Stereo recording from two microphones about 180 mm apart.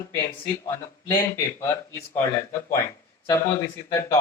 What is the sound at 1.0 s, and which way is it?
Speech, 15° left (ahead or behind).